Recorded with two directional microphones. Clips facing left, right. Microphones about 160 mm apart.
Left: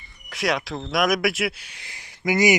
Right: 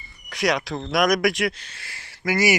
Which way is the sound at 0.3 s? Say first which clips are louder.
Right 2 dB; centre (ahead or behind).